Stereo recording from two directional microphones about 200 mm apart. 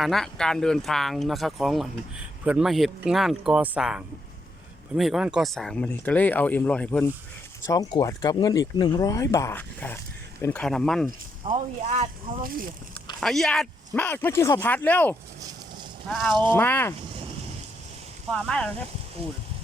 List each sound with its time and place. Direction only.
0.0 s speech: centre (ahead or behind)
7.6 s speech: 15° left (ahead or behind)
11.4 s speech: 40° right (ahead or behind)
13.1 s speech: centre (ahead or behind)
15.4 s a sound: 20° right (ahead or behind)
16.0 s speech: centre (ahead or behind)
18.3 s speech: 5° left (ahead or behind)